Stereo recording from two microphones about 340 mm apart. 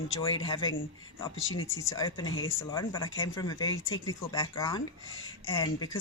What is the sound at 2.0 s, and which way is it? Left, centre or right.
Speech, centre.